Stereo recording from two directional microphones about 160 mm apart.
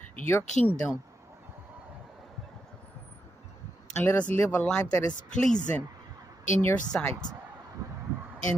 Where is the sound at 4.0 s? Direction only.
10° left (ahead or behind).